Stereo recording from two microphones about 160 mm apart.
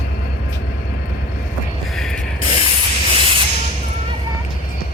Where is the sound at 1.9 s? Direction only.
5° left (ahead or behind).